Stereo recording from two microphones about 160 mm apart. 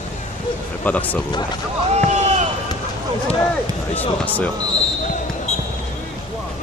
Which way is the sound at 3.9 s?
10° left (ahead or behind).